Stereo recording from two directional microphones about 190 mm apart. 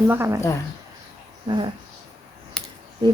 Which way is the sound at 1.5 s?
30° right (ahead or behind).